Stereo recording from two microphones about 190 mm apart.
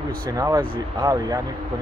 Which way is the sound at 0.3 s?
20° right (ahead or behind).